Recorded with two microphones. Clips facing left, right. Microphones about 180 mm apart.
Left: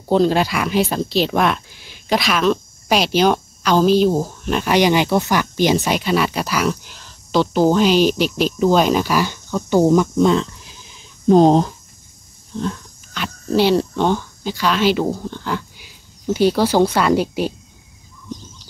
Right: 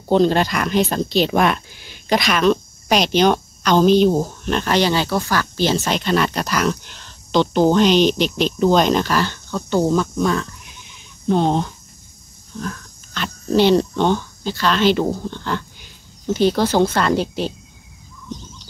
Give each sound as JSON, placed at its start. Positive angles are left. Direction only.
{"t": 0.1, "sound": "speech", "side_deg": 5}
{"t": 10.2, "sound": "a sound", "side_deg": 20}
{"t": 12.5, "sound": "speech", "side_deg": 25}
{"t": 13.1, "sound": "speech", "side_deg": 5}